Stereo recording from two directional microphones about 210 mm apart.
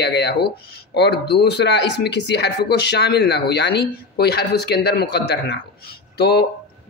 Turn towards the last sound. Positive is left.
turn(degrees=50)  # may be behind; listen again after turning